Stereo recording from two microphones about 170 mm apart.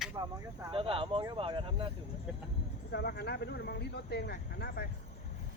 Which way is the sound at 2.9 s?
75° left (ahead or behind).